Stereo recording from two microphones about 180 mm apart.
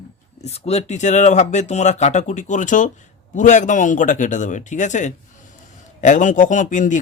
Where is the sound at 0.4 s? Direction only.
35° left (ahead or behind).